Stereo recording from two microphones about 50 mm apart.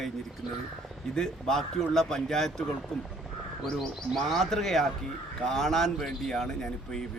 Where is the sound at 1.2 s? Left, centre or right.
Centre.